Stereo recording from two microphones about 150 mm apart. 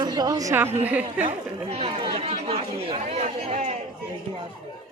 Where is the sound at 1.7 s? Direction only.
40° right (ahead or behind).